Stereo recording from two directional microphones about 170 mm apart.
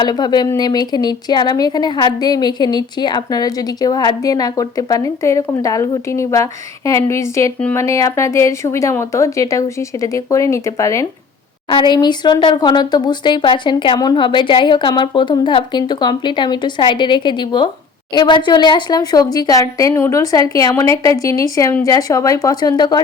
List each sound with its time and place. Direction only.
0.0 s a woman's voice: 25° left (ahead or behind)